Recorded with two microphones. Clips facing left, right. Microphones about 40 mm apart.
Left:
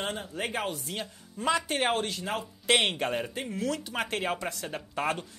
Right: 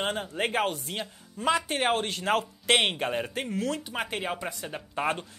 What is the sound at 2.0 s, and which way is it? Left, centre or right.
Speech, right.